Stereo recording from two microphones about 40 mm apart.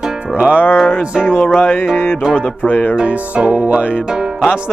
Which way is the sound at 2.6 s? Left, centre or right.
Left.